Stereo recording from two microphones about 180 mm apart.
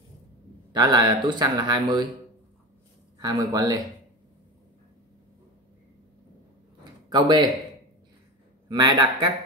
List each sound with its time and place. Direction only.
0.7 s speech: 25° right (ahead or behind)
3.2 s speech: 20° right (ahead or behind)
6.8 s a sound: 25° right (ahead or behind)
8.6 s speech: 25° right (ahead or behind)